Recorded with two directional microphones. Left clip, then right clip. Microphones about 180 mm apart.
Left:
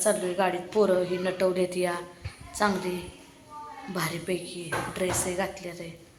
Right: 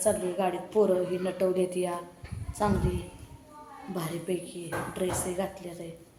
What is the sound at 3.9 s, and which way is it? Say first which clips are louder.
A woman's voice: left 3 dB; centre (ahead or behind).